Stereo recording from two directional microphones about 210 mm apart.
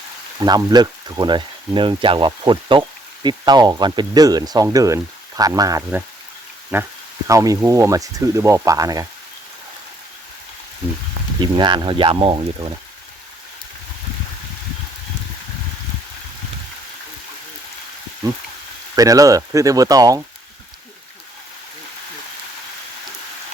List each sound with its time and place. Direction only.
0.3 s speech: 20° right (ahead or behind)
11.3 s speech: 20° right (ahead or behind)
18.2 s speech: 15° right (ahead or behind)